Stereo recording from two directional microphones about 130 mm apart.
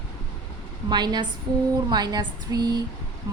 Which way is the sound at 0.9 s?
35° right (ahead or behind).